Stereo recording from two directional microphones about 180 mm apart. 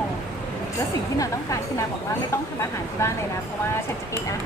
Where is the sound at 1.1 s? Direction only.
20° left (ahead or behind).